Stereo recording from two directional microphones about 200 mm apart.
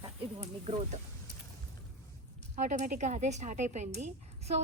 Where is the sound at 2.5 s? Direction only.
35° right (ahead or behind).